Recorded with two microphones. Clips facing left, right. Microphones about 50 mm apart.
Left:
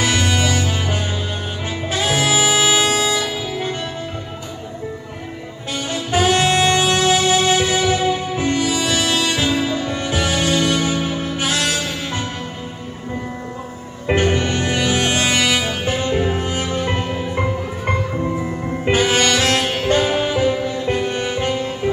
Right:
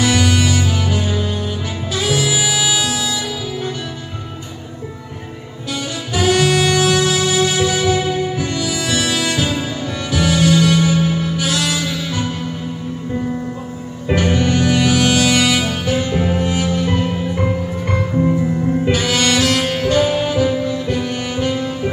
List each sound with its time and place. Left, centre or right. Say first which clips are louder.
0.0 s music: right 3 dB; left
5.7 s saxophone: left 1 dB; left
8.4 s music: left 2 dB; left
14.0 s music: right 1 dB; left
18.9 s music: left 4 dB; left